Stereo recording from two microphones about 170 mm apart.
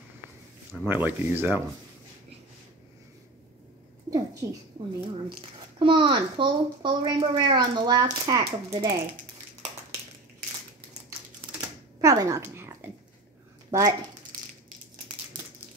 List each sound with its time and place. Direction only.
0.8 s speech: 10° right (ahead or behind)
4.1 s a sound: 20° right (ahead or behind)
5.8 s a woman's voice: 30° right (ahead or behind)
12.0 s dog: 20° right (ahead or behind)
13.7 s speech: 15° right (ahead or behind)